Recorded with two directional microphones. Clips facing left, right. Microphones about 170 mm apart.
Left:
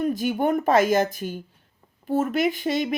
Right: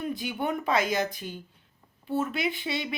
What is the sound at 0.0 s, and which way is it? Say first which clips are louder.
Speech: left 8 dB; 45° left (ahead or behind).